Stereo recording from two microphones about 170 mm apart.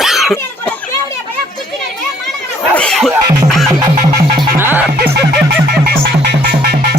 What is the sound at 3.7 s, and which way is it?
Music, 20° right (ahead or behind).